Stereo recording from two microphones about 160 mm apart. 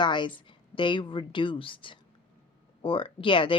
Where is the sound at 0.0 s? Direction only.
30° left (ahead or behind).